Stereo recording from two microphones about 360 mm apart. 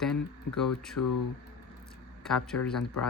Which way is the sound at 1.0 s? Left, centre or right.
Left.